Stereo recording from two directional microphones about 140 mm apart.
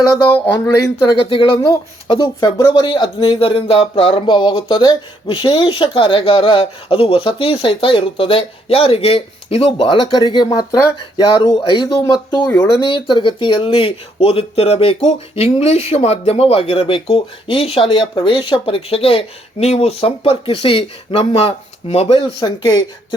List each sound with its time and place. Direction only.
1.2 s speech: 40° left (ahead or behind)